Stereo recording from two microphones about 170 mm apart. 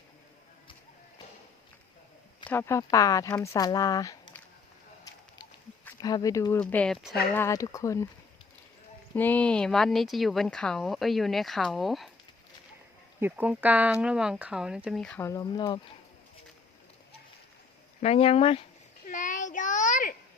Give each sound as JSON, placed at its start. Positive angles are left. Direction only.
{"t": 2.5, "sound": "speech", "side_deg": 15}
{"t": 6.0, "sound": "speech", "side_deg": 20}
{"t": 7.3, "sound": "speech", "side_deg": 15}
{"t": 9.1, "sound": "speech", "side_deg": 10}
{"t": 13.1, "sound": "speech", "side_deg": -10}
{"t": 15.2, "sound": "speech", "side_deg": 20}
{"t": 18.0, "sound": "speech", "side_deg": 35}
{"t": 19.0, "sound": "a sound", "side_deg": 50}